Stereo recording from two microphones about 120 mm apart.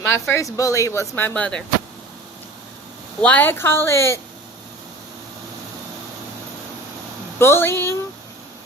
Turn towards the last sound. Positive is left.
turn(degrees=20)  # may be behind; listen again after turning